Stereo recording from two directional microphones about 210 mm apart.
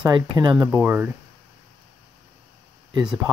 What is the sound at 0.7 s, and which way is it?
Speech, 10° right (ahead or behind).